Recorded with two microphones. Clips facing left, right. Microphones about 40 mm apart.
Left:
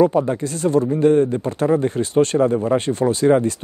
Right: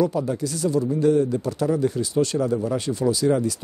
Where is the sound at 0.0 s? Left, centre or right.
Left.